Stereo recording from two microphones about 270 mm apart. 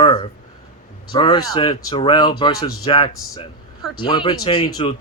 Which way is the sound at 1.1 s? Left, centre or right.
Centre.